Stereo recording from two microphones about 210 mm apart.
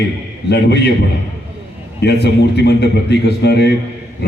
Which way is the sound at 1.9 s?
50° left (ahead or behind).